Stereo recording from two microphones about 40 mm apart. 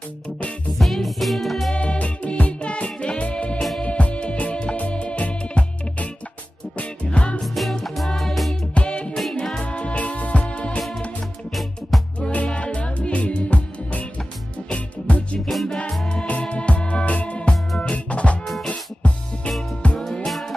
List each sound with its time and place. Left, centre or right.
0.7 s music: centre
1.8 s music: left
7.4 s music: centre
8.7 s music: left
9.1 s music: centre
9.7 s music: left
11.9 s music: centre
12.4 s music: left
15.4 s music: centre
16.3 s music: left
20.2 s music: centre